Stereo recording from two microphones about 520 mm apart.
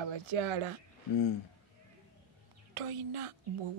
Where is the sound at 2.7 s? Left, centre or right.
Right.